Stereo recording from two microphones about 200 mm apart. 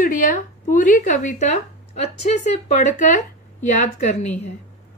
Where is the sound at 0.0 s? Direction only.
40° left (ahead or behind).